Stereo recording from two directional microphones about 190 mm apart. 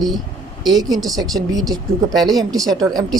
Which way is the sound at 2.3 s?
20° right (ahead or behind).